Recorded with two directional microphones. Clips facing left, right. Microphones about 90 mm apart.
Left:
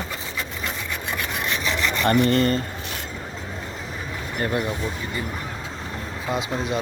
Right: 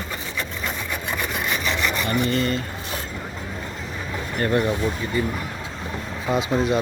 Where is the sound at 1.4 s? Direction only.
5° right (ahead or behind).